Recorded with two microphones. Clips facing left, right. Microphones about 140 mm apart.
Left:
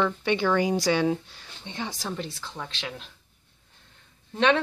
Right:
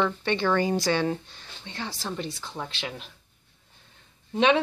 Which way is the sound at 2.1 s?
Centre (ahead or behind).